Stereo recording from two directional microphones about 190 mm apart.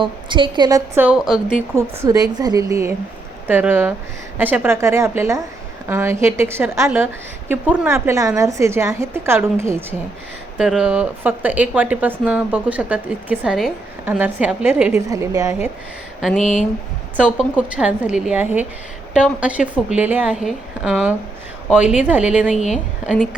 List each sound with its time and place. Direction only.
0.0 s a woman's voice: 25° right (ahead or behind)
0.9 s a woman's voice: 5° right (ahead or behind)
1.7 s a woman's voice: 15° right (ahead or behind)
16.4 s speech: 40° left (ahead or behind)
17.6 s a woman's voice: 5° right (ahead or behind)
22.5 s speech: 40° left (ahead or behind)